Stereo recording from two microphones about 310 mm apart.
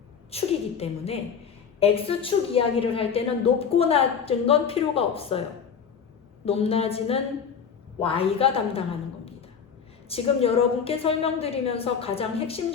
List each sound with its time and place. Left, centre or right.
0.3 s a woman's voice: centre